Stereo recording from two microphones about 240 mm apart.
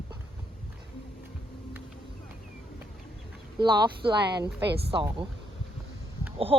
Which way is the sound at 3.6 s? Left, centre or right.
Centre.